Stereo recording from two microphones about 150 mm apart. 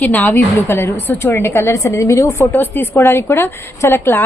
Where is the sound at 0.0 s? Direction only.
10° left (ahead or behind).